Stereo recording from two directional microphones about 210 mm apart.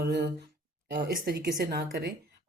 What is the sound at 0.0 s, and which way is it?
Speech, 50° right (ahead or behind).